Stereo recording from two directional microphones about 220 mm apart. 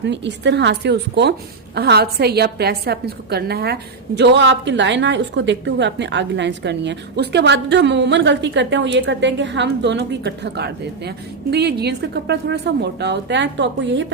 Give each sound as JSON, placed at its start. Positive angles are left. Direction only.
{"t": 0.0, "sound": "a woman's voice", "side_deg": -50}